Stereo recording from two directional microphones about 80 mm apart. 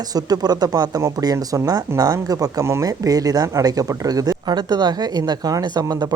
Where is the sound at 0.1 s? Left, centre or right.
Right.